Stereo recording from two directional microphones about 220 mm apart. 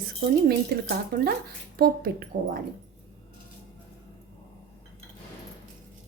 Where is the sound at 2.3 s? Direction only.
40° right (ahead or behind).